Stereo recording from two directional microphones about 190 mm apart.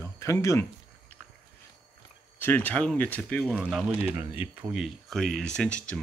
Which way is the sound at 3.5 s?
5° right (ahead or behind).